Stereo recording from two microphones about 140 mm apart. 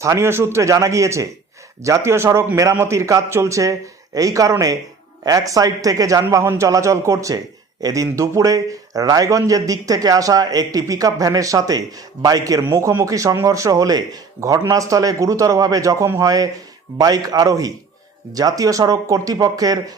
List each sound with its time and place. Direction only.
0.0 s a man's voice: 20° right (ahead or behind)